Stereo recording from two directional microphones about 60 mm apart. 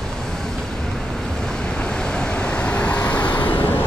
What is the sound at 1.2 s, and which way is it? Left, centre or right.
Vehicle, centre.